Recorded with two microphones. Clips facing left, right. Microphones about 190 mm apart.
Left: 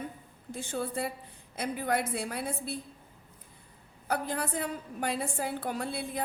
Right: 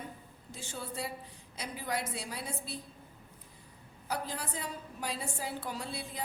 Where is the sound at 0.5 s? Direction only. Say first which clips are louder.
Left 7 dB; 55° left (ahead or behind).